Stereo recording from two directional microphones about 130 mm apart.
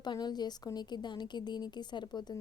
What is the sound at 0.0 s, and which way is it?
A woman's voice, 35° left (ahead or behind).